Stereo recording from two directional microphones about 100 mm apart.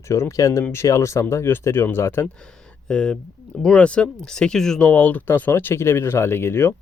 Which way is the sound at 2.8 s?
10° left (ahead or behind).